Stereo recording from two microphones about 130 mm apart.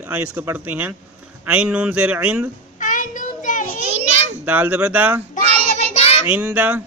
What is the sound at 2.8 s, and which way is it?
Child singing, 90° left.